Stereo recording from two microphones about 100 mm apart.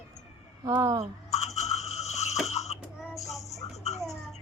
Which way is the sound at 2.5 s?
90° left.